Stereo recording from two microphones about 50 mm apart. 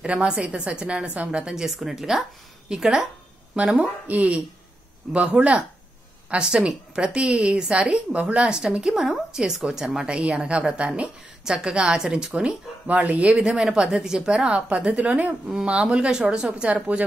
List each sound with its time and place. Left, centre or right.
0.0 s a woman's voice: right
8.5 s a woman's voice: centre
12.8 s speech: right
13.4 s a woman's voice: centre; by 15.3 s right
15.4 s a woman's voice: right